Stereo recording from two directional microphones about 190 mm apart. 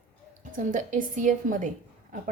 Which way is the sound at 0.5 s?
40° right (ahead or behind).